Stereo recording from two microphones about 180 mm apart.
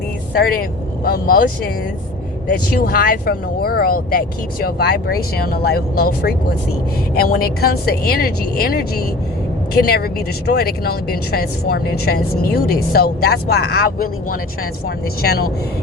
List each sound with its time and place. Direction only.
0.3 s speech: 55° left (ahead or behind)